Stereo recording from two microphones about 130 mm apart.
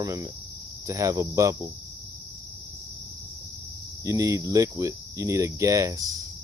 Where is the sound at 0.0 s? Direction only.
25° right (ahead or behind).